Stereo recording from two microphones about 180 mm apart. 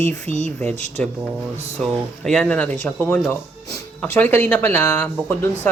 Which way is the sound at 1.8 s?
Centre (ahead or behind).